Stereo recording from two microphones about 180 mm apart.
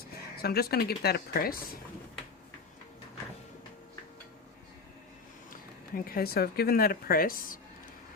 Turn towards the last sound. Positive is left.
turn(degrees=50)  # may be behind; listen again after turning